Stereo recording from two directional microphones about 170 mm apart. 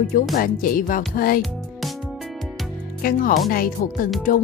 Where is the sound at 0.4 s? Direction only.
55° left (ahead or behind).